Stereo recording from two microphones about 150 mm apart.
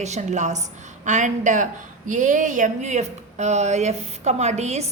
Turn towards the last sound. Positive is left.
turn(degrees=-50)  # may be behind; listen again after turning